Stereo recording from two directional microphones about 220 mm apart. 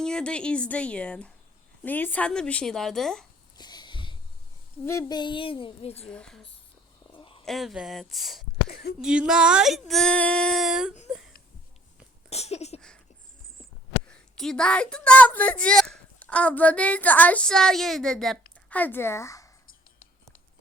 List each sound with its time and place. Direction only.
0.0 s a woman's voice: 5° left (ahead or behind)
3.6 s a sound: 20° left (ahead or behind)
4.9 s child singing: 15° left (ahead or behind)
6.1 s a woman's voice: 5° left (ahead or behind)
7.2 s a sound: 25° left (ahead or behind)
7.4 s a woman's voice: centre (ahead or behind)
12.3 s child singing: 30° left (ahead or behind)
14.3 s a woman's voice: 5° left (ahead or behind)